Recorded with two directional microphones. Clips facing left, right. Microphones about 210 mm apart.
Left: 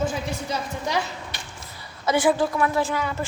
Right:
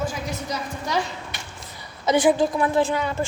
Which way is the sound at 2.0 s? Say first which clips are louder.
Right 2 dB; 20° right (ahead or behind).